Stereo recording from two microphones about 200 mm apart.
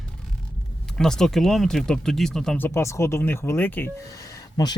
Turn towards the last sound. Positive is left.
turn(degrees=15)  # may be behind; listen again after turning